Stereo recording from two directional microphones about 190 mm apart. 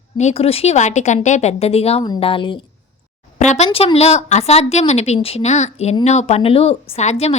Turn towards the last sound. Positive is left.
turn(degrees=35)  # may be behind; listen again after turning